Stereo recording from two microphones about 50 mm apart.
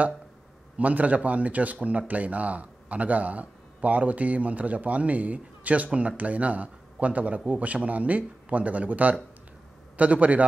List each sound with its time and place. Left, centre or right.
0.7 s a man's voice: right